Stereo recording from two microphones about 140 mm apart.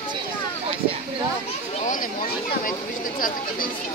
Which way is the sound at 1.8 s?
65° left (ahead or behind).